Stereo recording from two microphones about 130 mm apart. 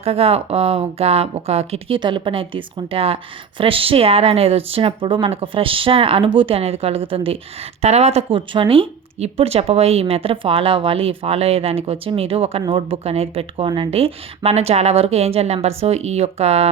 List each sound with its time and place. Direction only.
0.0 s speech: 50° right (ahead or behind)
2.0 s a woman's voice: 40° right (ahead or behind)
7.8 s speech: 55° right (ahead or behind)